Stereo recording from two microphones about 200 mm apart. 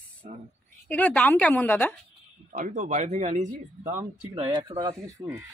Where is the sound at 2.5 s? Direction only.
40° right (ahead or behind).